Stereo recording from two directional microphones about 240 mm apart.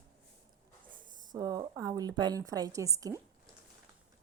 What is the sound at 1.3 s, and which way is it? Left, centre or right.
A woman's voice, centre.